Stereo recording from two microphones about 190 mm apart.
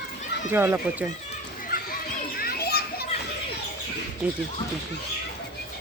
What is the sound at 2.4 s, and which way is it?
Children playing, 55° left (ahead or behind).